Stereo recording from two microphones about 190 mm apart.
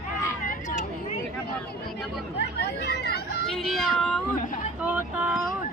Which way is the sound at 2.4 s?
65° left (ahead or behind).